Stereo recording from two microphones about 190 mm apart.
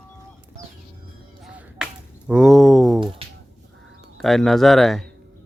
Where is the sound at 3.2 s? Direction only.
30° right (ahead or behind).